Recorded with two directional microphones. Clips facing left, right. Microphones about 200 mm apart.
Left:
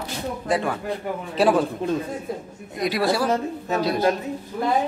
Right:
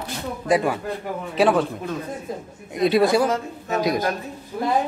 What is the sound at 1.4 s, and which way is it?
Speech, centre (ahead or behind).